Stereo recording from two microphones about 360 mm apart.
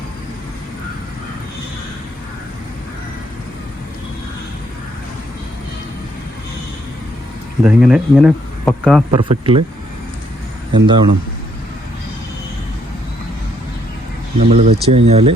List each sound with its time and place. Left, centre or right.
7.6 s speech: centre
9.3 s speech: centre
10.8 s speech: centre
14.3 s speech: centre